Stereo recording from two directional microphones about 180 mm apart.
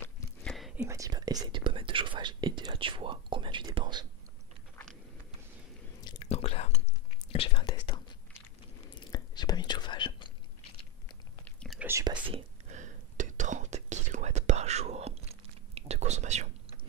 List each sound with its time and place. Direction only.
0.0 s whispering: 5° left (ahead or behind)
0.8 s whispering: 20° right (ahead or behind)
6.0 s whispering: 35° left (ahead or behind)
8.9 s whispering: 25° left (ahead or behind)
11.4 s whispering: 5° left (ahead or behind)
11.8 s whispering: 15° right (ahead or behind)
12.1 s whispering: 30° right (ahead or behind)